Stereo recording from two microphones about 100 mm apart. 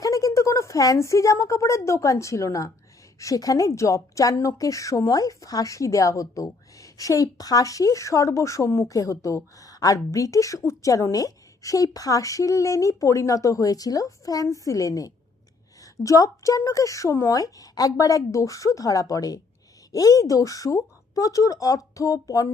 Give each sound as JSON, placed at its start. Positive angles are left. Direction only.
{"t": 0.0, "sound": "a woman's voice", "side_deg": 35}